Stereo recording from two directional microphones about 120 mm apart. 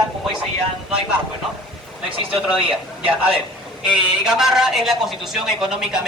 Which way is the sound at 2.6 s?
45° right (ahead or behind).